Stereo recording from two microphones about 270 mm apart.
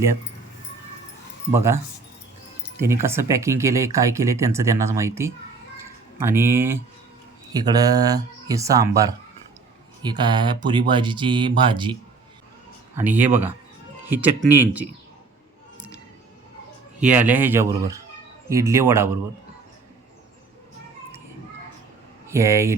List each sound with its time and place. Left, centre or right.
1.5 s speech: centre
2.8 s speech: centre
5.8 s a sound: centre
7.5 s speech: centre
13.0 s speech: centre
17.0 s speech: centre
22.3 s speech: centre